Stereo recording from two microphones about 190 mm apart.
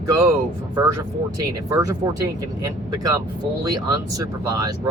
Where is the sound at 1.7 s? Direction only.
15° right (ahead or behind).